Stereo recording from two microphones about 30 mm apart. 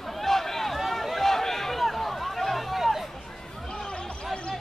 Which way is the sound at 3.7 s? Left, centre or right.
Left.